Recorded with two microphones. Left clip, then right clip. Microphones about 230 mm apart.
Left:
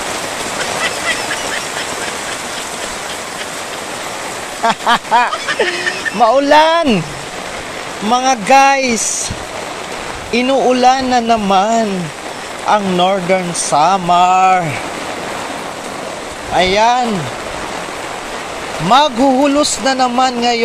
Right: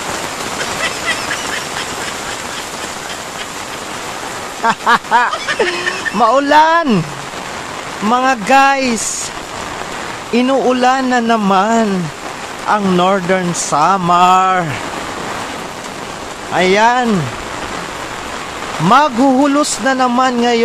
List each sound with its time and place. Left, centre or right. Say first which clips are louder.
4.6 s speech: right 1 dB; centre
8.1 s speech: left 1 dB; centre
10.3 s speech: left 1 dB; centre
16.5 s speech: even; centre
18.9 s speech: even; centre